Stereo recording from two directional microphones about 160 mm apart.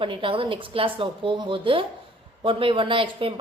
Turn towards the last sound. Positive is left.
turn(degrees=-35)  # may be behind; listen again after turning